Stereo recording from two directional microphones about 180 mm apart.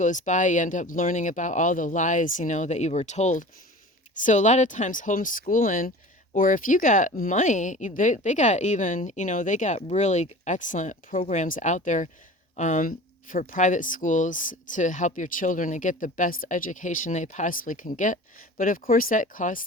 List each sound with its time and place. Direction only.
0.0 s speech: 45° left (ahead or behind)